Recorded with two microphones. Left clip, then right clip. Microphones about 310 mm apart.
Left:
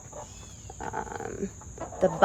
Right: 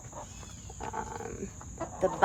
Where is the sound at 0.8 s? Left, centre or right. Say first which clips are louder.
Left 3 dB; left.